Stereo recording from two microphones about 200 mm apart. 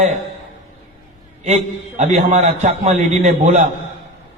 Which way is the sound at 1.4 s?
35° right (ahead or behind).